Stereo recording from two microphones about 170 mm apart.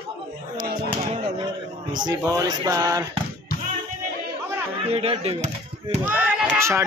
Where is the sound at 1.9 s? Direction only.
25° right (ahead or behind).